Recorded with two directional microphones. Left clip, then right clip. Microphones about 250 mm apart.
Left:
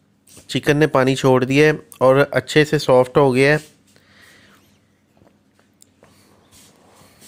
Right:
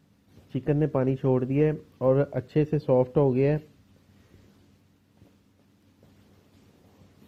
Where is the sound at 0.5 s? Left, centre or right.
Left.